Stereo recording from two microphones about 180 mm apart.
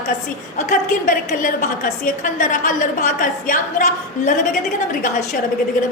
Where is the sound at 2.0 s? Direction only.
45° left (ahead or behind).